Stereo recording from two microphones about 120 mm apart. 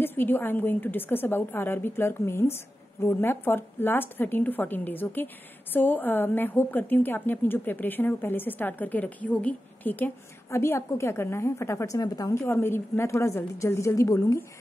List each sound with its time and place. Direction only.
0.0 s a woman's voice: 15° left (ahead or behind)